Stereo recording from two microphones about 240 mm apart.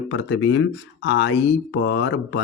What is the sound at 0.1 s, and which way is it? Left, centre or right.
Speech, left.